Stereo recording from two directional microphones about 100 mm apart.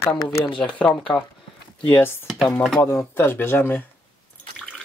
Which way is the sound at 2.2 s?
Centre (ahead or behind).